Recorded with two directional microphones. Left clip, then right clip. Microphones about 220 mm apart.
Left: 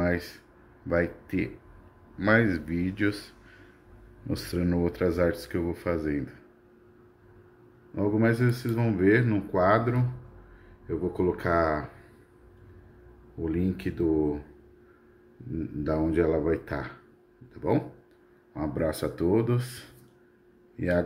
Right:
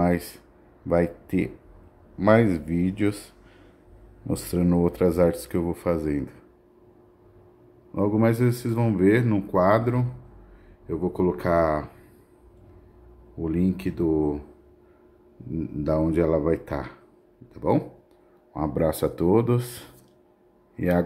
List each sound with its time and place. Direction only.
0.0 s a sound: 20° right (ahead or behind)
0.8 s speech: 15° right (ahead or behind)
7.9 s speech: 20° right (ahead or behind)
13.4 s speech: 15° right (ahead or behind)
15.8 s speech: 20° right (ahead or behind)